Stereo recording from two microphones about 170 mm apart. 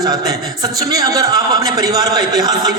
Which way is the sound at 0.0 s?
20° right (ahead or behind).